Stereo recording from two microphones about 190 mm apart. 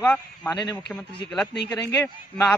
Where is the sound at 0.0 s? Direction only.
5° left (ahead or behind).